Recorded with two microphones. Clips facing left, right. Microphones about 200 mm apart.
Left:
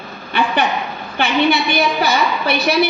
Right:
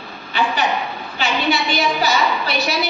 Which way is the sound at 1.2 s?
55° left (ahead or behind).